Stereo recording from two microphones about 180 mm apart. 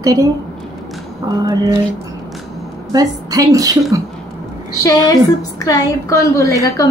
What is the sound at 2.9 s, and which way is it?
Speech, 20° right (ahead or behind).